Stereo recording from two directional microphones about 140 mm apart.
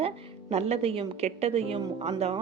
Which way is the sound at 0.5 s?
45° right (ahead or behind).